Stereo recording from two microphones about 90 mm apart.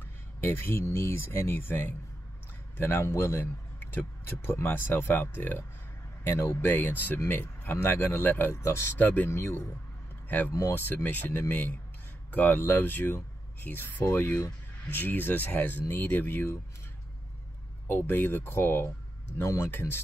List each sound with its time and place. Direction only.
0.4 s a man's voice: 25° left (ahead or behind)
8.9 s a man's voice: 20° left (ahead or behind)
17.8 s a man's voice: 25° left (ahead or behind)